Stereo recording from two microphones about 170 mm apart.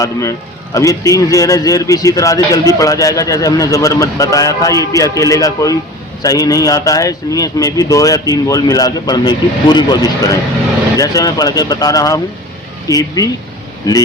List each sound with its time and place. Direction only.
0.0 s a man's voice: 20° left (ahead or behind)